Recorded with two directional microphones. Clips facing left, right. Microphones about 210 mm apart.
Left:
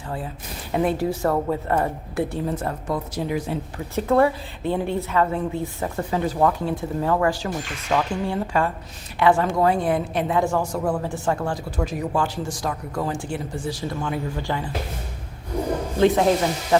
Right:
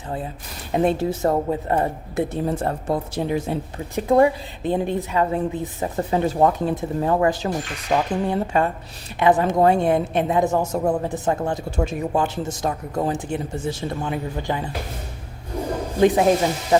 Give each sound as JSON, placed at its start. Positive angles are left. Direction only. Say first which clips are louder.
{"t": 0.7, "sound": "a woman's voice", "louder": "right 2 dB", "side_deg": -25}
{"t": 3.9, "sound": "a woman's voice", "louder": "right 2 dB", "side_deg": -15}
{"t": 16.0, "sound": "speech", "louder": "right 1 dB", "side_deg": -15}